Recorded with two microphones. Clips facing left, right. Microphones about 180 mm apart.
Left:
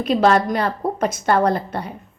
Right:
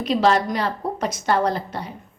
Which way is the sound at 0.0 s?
55° left (ahead or behind).